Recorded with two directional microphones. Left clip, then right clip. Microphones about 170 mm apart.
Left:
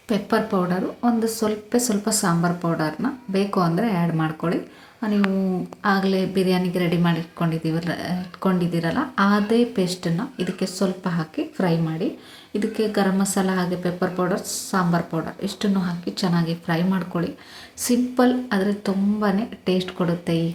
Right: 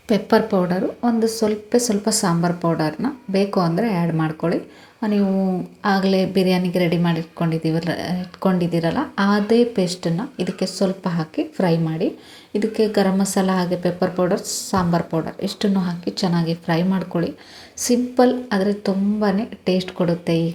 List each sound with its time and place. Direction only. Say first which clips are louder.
0.1 s a woman's voice: right 5 dB; 20° right (ahead or behind)